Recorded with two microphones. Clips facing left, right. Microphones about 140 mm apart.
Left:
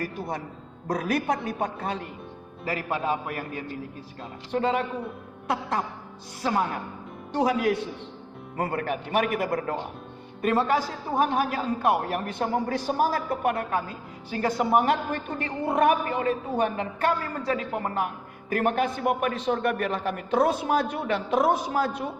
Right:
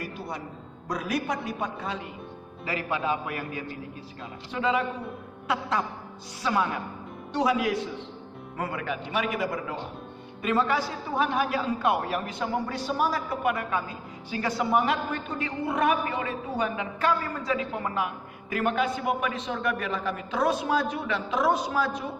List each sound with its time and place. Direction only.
0.9 s a woman's voice: 55° left (ahead or behind)
4.5 s a woman's voice: 45° left (ahead or behind)
6.5 s a woman's voice: 40° left (ahead or behind)